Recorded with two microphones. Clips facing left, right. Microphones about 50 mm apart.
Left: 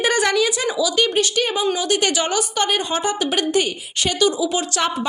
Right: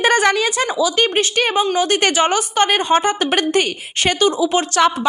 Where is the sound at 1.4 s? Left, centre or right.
Right.